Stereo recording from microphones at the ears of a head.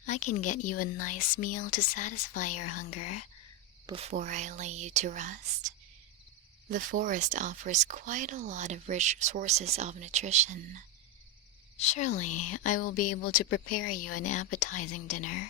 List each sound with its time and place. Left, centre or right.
0.0 s speech: left
3.8 s speech: right
11.8 s speech: left